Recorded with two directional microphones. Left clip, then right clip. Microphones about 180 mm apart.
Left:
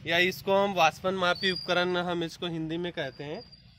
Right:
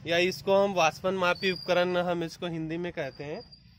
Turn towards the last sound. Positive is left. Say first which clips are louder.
# even
turn(degrees=-10)  # may be behind; listen again after turning